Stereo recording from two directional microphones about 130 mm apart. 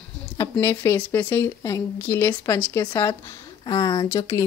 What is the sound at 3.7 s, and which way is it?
Speech, 25° left (ahead or behind).